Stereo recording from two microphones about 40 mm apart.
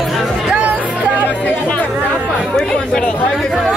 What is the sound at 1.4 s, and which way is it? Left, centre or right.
Speech, left.